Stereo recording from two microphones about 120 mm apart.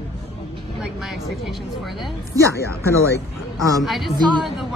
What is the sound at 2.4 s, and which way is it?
Speech, 25° right (ahead or behind).